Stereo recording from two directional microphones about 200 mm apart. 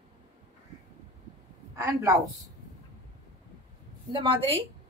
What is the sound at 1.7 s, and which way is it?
Speech, 15° right (ahead or behind).